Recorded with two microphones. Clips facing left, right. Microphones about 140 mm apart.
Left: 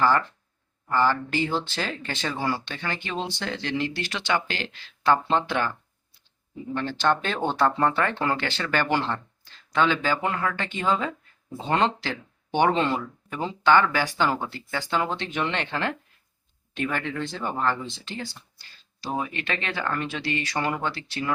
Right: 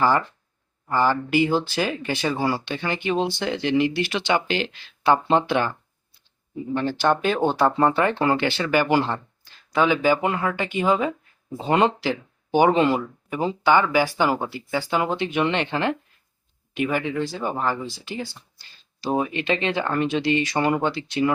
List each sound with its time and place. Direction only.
0.0 s speech: 15° right (ahead or behind)
6.7 s speech: 10° right (ahead or behind)
7.8 s speech: 15° right (ahead or behind)